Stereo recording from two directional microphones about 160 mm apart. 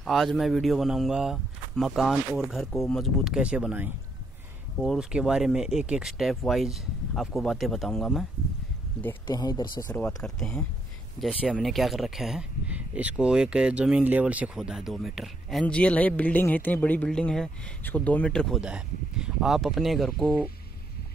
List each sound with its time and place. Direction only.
0.0 s speech: centre (ahead or behind)
9.3 s speech: 25° left (ahead or behind)
9.9 s speech: 5° left (ahead or behind)
18.6 s speech: 5° right (ahead or behind)